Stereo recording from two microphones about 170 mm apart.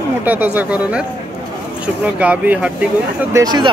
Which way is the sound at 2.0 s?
10° right (ahead or behind).